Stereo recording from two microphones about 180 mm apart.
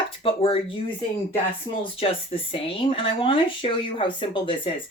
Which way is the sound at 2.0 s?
30° left (ahead or behind).